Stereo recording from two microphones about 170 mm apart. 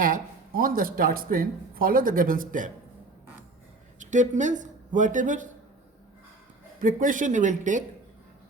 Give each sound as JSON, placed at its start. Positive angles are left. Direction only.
{"t": 0.0, "sound": "speech", "side_deg": -55}
{"t": 4.0, "sound": "speech", "side_deg": -45}
{"t": 6.7, "sound": "speech", "side_deg": -55}